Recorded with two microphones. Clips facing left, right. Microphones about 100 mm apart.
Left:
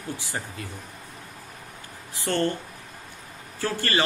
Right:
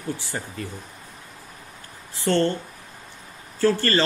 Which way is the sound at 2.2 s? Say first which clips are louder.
Right 4 dB; 15° left (ahead or behind).